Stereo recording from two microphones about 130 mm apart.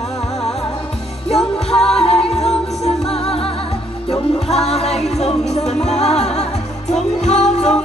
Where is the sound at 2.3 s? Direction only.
55° left (ahead or behind).